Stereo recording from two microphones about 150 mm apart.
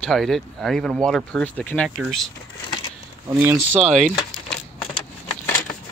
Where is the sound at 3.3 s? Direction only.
15° right (ahead or behind).